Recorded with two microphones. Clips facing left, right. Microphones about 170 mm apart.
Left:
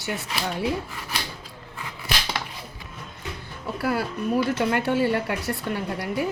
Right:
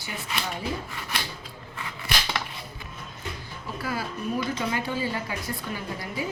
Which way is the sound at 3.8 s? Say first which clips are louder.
Left 6 dB; 65° left (ahead or behind).